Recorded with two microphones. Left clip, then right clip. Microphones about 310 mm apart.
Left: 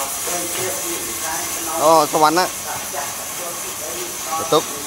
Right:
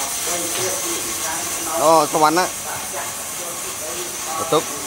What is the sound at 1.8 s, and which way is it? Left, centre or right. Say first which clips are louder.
Speech: left 1 dB; centre.